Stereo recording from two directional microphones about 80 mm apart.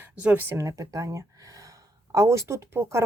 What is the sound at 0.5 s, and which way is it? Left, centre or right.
Speech, right.